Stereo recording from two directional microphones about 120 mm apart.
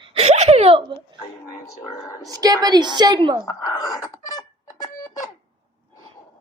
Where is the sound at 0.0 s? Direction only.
50° right (ahead or behind).